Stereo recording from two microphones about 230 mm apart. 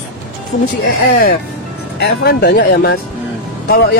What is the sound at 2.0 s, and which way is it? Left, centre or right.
Speech, left.